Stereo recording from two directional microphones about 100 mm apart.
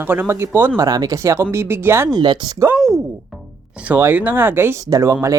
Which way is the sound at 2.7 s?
Centre (ahead or behind).